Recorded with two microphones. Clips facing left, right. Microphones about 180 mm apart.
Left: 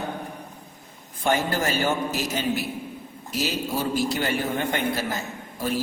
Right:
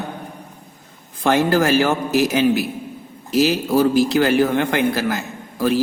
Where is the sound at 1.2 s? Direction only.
90° right.